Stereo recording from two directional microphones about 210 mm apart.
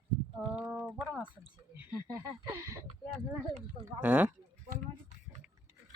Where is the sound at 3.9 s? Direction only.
10° right (ahead or behind).